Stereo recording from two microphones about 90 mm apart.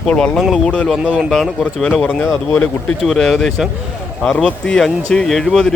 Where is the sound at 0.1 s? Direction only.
10° left (ahead or behind).